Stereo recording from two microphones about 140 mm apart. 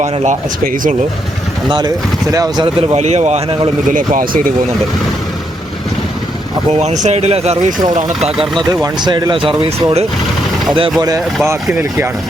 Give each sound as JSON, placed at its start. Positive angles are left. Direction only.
{"t": 0.0, "sound": "speech", "side_deg": -60}
{"t": 2.3, "sound": "speech", "side_deg": -25}
{"t": 2.9, "sound": "speech", "side_deg": -55}
{"t": 3.9, "sound": "speech", "side_deg": -80}
{"t": 6.7, "sound": "speech", "side_deg": -55}
{"t": 8.7, "sound": "speech", "side_deg": -30}
{"t": 11.4, "sound": "speech", "side_deg": -15}